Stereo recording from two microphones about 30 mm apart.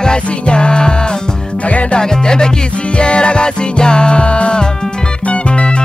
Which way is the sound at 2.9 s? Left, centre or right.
Left.